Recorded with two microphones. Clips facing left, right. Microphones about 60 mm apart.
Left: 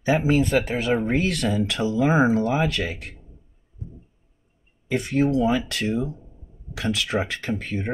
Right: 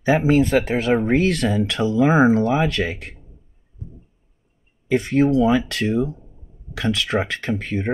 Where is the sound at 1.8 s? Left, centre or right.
Centre.